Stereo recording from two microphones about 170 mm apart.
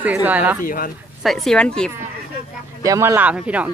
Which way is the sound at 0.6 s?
55° left (ahead or behind).